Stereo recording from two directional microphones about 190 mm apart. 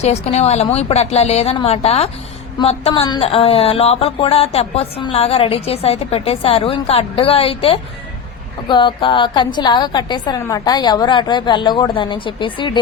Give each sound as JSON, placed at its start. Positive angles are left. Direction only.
{"t": 0.0, "sound": "a woman's voice", "side_deg": 35}